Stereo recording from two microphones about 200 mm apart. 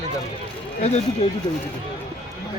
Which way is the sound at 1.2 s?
30° left (ahead or behind).